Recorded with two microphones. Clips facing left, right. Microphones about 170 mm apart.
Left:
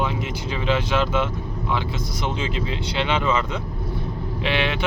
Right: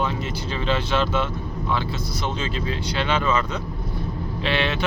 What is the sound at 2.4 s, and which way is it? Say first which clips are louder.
Speech: left 1 dB; 20° left (ahead or behind).